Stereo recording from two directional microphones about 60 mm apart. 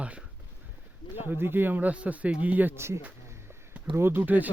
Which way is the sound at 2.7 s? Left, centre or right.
Right.